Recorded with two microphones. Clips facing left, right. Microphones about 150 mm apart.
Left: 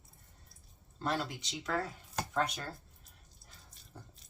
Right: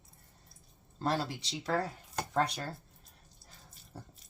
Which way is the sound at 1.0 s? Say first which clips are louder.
Right 3 dB; 30° right (ahead or behind).